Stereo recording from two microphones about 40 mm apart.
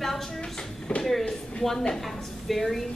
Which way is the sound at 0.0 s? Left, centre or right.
Centre.